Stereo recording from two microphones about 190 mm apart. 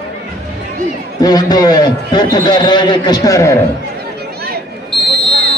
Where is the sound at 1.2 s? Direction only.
20° left (ahead or behind).